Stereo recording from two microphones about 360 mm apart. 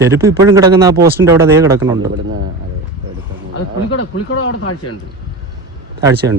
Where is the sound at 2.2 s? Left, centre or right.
Right.